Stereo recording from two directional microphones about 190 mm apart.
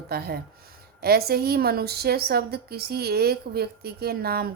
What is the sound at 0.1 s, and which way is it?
A woman's voice, 55° right (ahead or behind).